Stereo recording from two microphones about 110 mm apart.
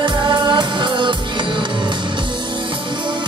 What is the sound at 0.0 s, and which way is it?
Music, 45° right (ahead or behind).